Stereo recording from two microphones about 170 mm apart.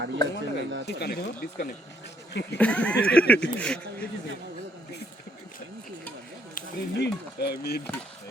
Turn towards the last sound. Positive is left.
turn(degrees=70)  # may be behind; listen again after turning